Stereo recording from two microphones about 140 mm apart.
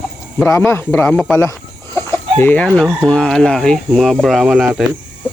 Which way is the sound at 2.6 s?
Centre (ahead or behind).